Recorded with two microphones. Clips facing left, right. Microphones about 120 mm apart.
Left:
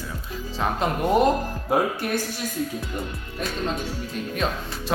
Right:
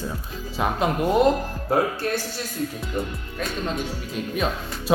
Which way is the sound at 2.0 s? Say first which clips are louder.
Right 1 dB; 15° left (ahead or behind).